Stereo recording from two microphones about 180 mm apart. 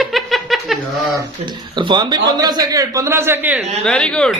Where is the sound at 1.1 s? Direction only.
25° right (ahead or behind).